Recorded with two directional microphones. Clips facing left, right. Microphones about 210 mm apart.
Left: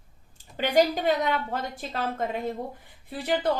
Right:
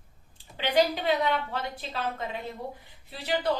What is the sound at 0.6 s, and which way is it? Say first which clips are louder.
A woman's voice: left 3 dB; 45° left (ahead or behind).